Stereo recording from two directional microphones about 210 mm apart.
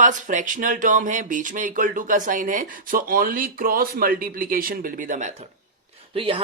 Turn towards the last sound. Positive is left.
turn(degrees=-25)  # may be behind; listen again after turning